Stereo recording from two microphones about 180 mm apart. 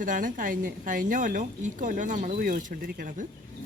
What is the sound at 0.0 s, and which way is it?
A woman's voice, 45° right (ahead or behind).